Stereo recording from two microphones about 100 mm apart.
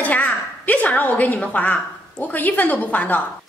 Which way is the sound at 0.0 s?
15° left (ahead or behind).